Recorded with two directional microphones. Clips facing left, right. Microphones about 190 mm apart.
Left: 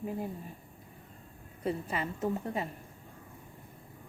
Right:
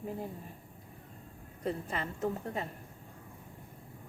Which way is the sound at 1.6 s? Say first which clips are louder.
Left 2 dB; 5° left (ahead or behind).